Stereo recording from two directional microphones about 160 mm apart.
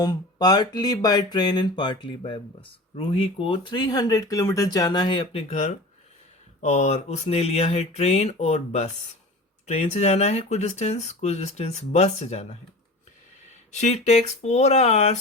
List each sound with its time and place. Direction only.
0.0 s speech: 25° left (ahead or behind)
5.5 s speech: 45° left (ahead or behind)
13.7 s speech: 45° left (ahead or behind)